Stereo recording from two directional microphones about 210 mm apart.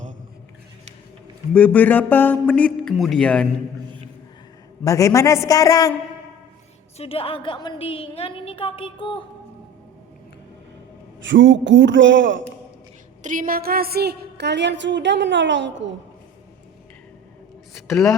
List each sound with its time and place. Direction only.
1.5 s speech: 5° left (ahead or behind)
4.8 s speech: 15° left (ahead or behind)
6.9 s a woman's voice: 30° left (ahead or behind)
11.2 s a woman's voice: 60° right (ahead or behind)
13.2 s a woman's voice: 40° right (ahead or behind); by 15.9 s 60° right (ahead or behind)
17.7 s a woman's voice: centre (ahead or behind)